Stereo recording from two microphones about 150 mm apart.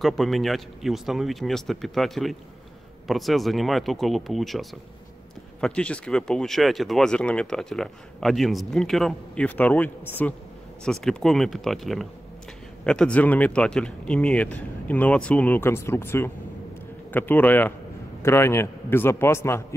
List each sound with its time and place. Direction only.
0.0 s speech: centre (ahead or behind); by 19.6 s 15° left (ahead or behind)